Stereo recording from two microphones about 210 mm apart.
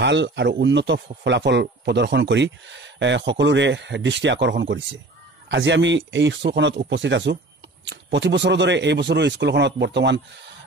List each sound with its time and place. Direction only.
0.0 s speech: 55° right (ahead or behind)